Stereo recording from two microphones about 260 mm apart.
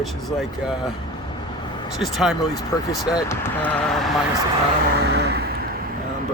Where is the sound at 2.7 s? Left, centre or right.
Centre.